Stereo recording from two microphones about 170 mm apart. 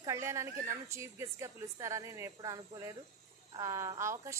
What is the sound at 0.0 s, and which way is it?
A woman's voice, 15° right (ahead or behind).